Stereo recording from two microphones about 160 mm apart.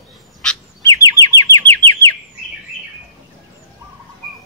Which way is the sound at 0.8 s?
20° left (ahead or behind).